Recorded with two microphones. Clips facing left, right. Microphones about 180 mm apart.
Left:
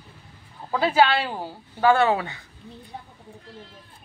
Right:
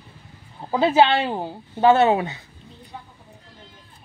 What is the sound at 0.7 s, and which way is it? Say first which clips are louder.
Speech: right 3 dB; 20° right (ahead or behind).